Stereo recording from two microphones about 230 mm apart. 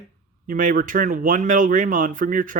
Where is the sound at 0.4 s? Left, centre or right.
Right.